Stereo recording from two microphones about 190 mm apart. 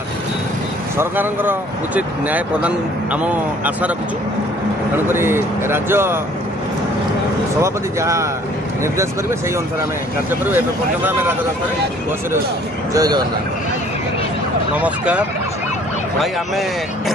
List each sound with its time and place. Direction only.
0.9 s speech: 10° right (ahead or behind)
4.9 s speech: 10° right (ahead or behind)
7.6 s speech: 15° right (ahead or behind)
12.9 s a man's voice: 20° right (ahead or behind)
14.8 s speech: 5° right (ahead or behind)